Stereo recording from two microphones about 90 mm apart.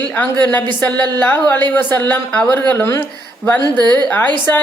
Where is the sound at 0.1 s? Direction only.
15° left (ahead or behind).